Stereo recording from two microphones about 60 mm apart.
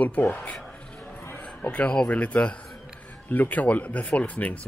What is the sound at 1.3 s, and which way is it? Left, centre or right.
A man's voice, left.